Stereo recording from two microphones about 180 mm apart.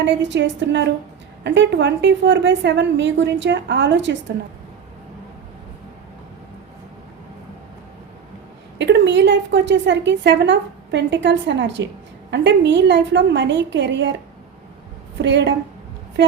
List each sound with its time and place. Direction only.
0.0 s a woman's voice: 80° right
8.8 s a woman's voice: 80° right
15.2 s a woman's voice: 75° right (ahead or behind)